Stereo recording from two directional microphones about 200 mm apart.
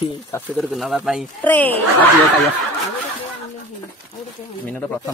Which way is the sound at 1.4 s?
10° left (ahead or behind).